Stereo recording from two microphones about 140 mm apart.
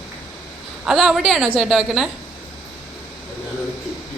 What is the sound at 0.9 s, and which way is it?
A woman's voice, centre (ahead or behind).